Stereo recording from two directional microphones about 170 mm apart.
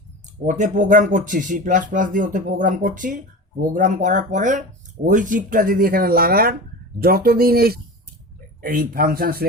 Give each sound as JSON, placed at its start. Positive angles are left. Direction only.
{"t": 0.4, "sound": "speech", "side_deg": -45}
{"t": 8.6, "sound": "speech", "side_deg": -55}